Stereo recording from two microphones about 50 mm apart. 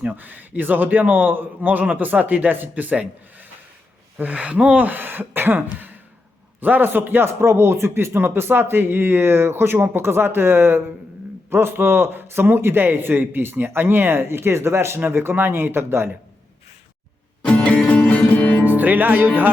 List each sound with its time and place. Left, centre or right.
0.1 s a man's voice: right
4.2 s a man's voice: right
7.4 s a man's voice: right
17.4 s music: left
18.6 s speech: right